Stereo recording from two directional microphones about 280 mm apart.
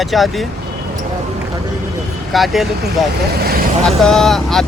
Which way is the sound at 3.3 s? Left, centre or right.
Right.